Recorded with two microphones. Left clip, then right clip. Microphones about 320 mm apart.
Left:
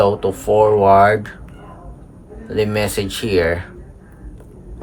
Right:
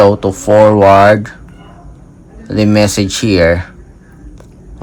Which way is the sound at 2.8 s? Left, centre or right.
Centre.